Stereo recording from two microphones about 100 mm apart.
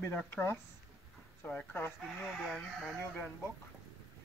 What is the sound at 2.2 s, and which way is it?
Speech, 5° left (ahead or behind).